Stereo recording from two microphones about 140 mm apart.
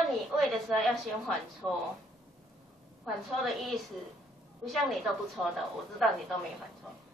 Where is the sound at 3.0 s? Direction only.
Centre (ahead or behind).